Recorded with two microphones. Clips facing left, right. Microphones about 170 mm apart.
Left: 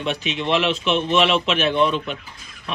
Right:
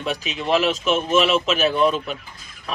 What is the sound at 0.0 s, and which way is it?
Speech, 40° right (ahead or behind).